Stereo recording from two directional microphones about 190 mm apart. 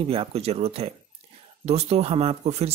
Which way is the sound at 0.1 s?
30° right (ahead or behind).